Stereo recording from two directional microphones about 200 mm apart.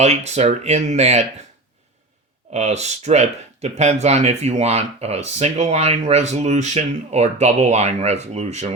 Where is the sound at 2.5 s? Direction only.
35° right (ahead or behind).